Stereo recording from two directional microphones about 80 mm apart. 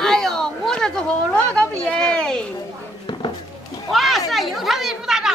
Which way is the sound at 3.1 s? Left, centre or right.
Left.